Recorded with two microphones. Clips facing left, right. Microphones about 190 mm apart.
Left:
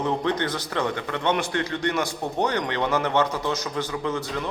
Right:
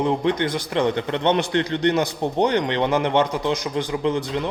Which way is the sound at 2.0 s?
20° right (ahead or behind).